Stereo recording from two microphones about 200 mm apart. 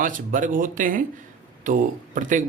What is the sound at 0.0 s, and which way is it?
A man's voice, 45° right (ahead or behind).